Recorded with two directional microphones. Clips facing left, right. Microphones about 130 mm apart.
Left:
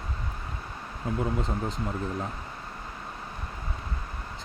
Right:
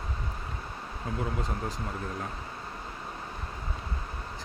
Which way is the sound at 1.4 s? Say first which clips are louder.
Left 3 dB; 20° left (ahead or behind).